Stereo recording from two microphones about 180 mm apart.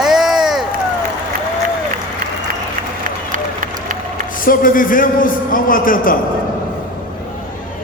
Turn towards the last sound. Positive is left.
turn(degrees=50)  # may be behind; listen again after turning